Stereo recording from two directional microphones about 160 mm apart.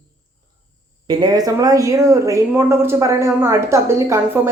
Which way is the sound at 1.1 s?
25° right (ahead or behind).